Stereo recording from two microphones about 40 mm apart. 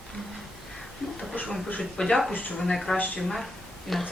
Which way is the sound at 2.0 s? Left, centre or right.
Left.